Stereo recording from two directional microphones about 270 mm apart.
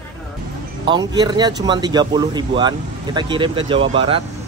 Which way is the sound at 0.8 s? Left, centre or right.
Centre.